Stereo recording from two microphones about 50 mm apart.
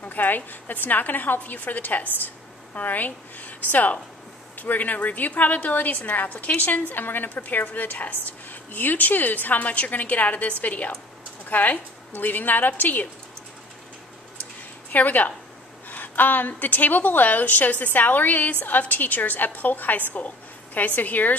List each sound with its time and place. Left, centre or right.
0.0 s a woman's voice: left
14.9 s a woman's voice: left